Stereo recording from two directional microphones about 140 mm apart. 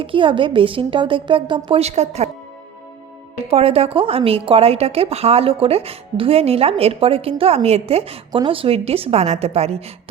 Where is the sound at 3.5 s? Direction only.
45° right (ahead or behind).